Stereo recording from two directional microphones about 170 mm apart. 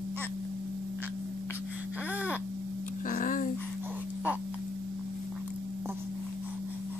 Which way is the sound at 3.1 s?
50° left (ahead or behind).